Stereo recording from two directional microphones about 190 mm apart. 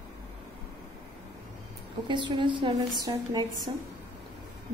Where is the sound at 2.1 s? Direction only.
25° right (ahead or behind).